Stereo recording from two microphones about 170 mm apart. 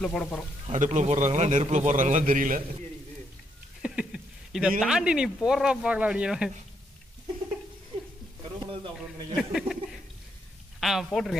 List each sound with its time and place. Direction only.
0.0 s speech: 5° left (ahead or behind)
0.7 s a man's voice: 45° right (ahead or behind)
3.8 s speech: 5° right (ahead or behind)
8.5 s a sound: 30° right (ahead or behind)
9.4 s speech: 5° right (ahead or behind)